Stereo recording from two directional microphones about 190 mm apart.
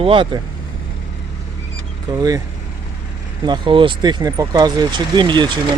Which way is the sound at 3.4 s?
25° right (ahead or behind).